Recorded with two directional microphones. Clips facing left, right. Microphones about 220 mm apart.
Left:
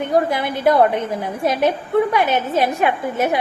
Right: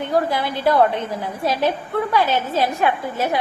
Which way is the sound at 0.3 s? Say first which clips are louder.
Left 2 dB; 20° left (ahead or behind).